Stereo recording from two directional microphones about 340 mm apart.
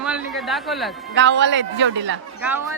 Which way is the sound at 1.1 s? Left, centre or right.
Right.